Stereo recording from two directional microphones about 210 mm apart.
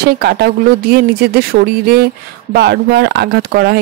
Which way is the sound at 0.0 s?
50° right (ahead or behind).